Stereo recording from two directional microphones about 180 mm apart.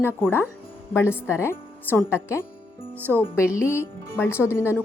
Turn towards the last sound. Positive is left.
turn(degrees=15)  # may be behind; listen again after turning